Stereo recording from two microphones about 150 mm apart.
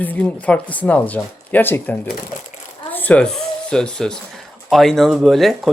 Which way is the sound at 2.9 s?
10° left (ahead or behind).